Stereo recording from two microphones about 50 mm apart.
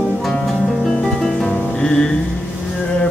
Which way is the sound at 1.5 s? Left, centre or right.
Centre.